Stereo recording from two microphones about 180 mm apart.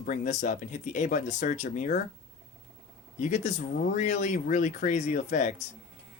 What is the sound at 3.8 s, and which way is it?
Speech, 45° left (ahead or behind).